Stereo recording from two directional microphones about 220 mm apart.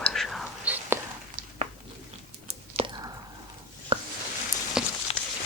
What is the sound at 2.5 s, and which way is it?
Whispering, 25° right (ahead or behind).